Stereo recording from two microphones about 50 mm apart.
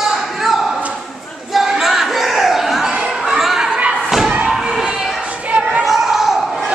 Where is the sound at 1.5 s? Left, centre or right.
Centre.